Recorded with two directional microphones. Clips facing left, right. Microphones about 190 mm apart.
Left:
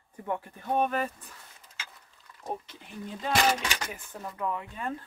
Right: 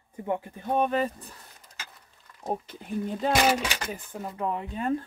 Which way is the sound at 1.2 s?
35° right (ahead or behind).